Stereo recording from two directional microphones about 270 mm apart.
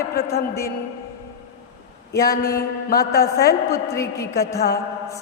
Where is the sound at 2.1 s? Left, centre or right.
Left.